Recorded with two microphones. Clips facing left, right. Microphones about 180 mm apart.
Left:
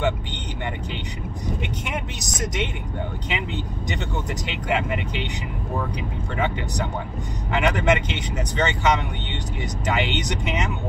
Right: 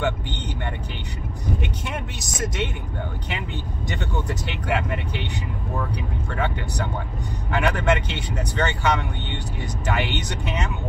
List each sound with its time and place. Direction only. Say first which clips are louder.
1.6 s speech: left 1 dB; 20° left (ahead or behind)
6.3 s speech: left 2 dB; 20° left (ahead or behind)